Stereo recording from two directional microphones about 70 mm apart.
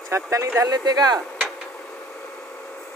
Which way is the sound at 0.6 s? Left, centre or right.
Right.